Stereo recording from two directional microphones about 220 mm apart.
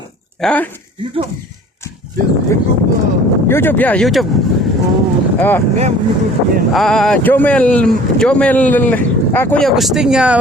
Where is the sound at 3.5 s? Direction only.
10° left (ahead or behind).